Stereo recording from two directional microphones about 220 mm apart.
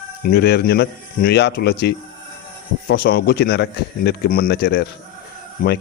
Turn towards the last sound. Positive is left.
turn(degrees=40)  # may be behind; listen again after turning